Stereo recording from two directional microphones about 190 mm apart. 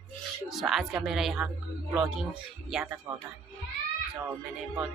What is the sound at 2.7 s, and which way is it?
Speech, centre (ahead or behind).